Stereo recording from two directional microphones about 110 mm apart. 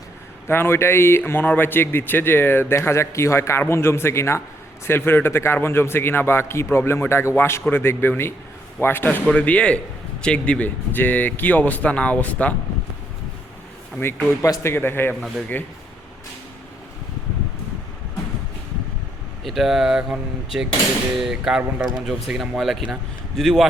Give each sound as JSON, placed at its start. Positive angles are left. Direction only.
{"t": 0.4, "sound": "a man's voice", "side_deg": 20}
{"t": 14.3, "sound": "a man's voice", "side_deg": 25}
{"t": 19.5, "sound": "speech", "side_deg": -5}